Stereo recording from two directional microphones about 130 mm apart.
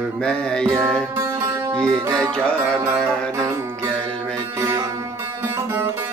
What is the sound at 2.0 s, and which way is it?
Music, 30° right (ahead or behind).